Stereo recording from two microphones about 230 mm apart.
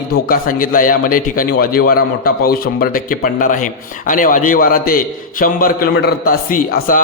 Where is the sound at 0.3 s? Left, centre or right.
Left.